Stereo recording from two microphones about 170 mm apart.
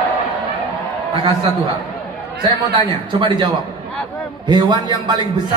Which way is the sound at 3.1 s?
30° right (ahead or behind).